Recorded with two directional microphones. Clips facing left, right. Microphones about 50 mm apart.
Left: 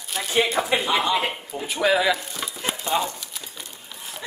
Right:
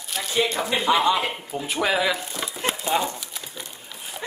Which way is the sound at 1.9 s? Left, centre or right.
Centre.